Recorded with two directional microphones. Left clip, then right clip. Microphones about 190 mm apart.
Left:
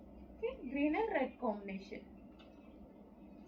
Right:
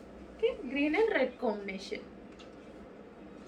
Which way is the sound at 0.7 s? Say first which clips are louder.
Right 4 dB; 20° right (ahead or behind).